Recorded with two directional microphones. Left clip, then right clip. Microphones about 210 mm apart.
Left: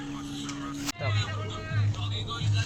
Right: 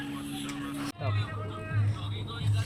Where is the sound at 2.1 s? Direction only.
55° left (ahead or behind).